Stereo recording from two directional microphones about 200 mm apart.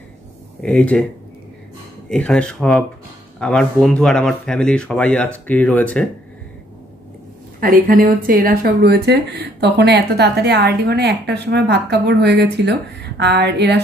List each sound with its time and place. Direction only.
0.6 s speech: 5° left (ahead or behind)
2.0 s speech: 5° left (ahead or behind)
7.6 s speech: 45° right (ahead or behind)